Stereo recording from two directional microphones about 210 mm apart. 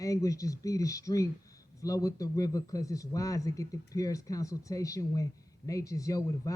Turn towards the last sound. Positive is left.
turn(degrees=15)  # may be behind; listen again after turning